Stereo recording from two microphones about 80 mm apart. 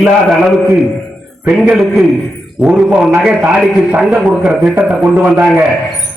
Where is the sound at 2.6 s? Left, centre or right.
Centre.